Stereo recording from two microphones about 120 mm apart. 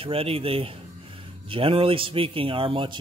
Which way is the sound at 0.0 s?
50° right (ahead or behind).